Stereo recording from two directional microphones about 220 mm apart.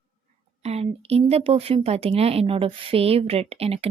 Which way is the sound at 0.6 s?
30° right (ahead or behind).